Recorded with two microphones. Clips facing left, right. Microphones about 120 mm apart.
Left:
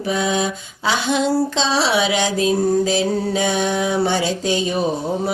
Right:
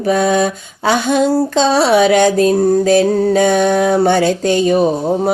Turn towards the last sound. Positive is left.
turn(degrees=-50)  # may be behind; listen again after turning